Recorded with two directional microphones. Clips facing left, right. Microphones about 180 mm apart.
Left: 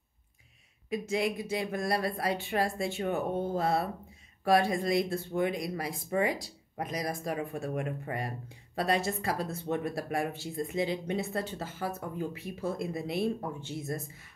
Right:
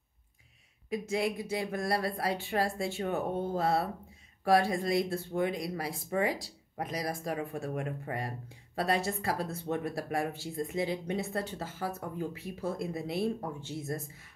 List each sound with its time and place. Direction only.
0.8 s speech: 20° left (ahead or behind)